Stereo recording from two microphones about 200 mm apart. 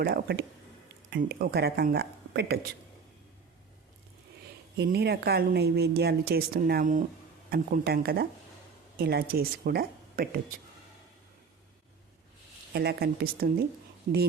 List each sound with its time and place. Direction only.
0.0 s speech: 50° right (ahead or behind)
4.8 s speech: 55° right (ahead or behind)
12.7 s speech: 50° right (ahead or behind)